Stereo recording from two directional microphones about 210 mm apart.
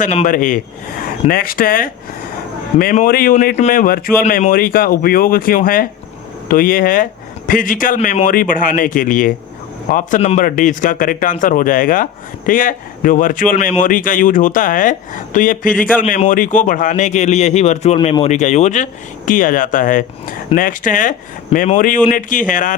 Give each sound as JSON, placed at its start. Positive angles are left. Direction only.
{"t": 0.0, "sound": "speech", "side_deg": 35}